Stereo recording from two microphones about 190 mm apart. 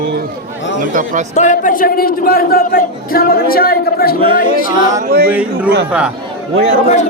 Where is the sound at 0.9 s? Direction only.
45° right (ahead or behind).